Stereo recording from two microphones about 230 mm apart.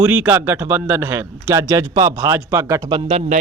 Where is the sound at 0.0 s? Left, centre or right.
Centre.